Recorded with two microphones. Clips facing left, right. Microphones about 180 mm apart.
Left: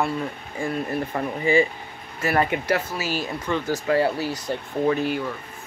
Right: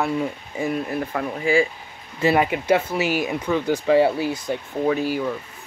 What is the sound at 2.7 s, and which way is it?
Speech, 20° right (ahead or behind).